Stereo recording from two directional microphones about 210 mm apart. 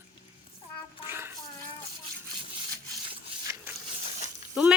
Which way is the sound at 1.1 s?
10° right (ahead or behind).